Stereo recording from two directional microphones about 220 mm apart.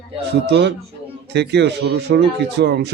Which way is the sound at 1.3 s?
50° right (ahead or behind).